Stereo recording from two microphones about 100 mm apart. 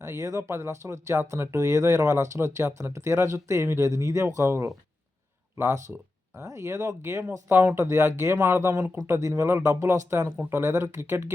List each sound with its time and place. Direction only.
0.0 s speech: 30° right (ahead or behind)
8.7 s speech: 35° right (ahead or behind)